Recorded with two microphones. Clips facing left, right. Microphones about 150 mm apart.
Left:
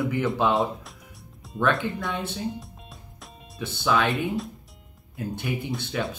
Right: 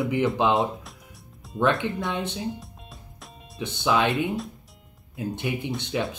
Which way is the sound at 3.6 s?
20° right (ahead or behind).